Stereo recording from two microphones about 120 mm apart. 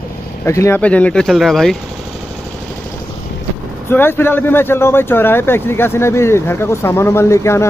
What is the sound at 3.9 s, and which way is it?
Speech, 20° left (ahead or behind).